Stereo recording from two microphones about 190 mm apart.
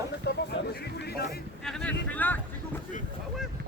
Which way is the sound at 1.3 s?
5° left (ahead or behind).